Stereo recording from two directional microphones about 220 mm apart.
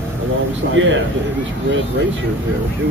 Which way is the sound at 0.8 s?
55° right (ahead or behind).